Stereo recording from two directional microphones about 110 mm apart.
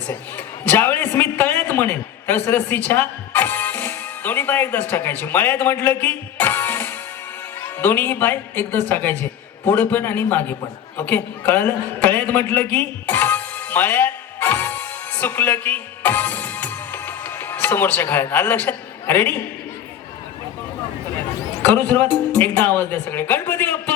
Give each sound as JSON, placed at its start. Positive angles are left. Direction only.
{"t": 0.1, "sound": "a man's voice", "side_deg": 15}
{"t": 21.1, "sound": "speech", "side_deg": 20}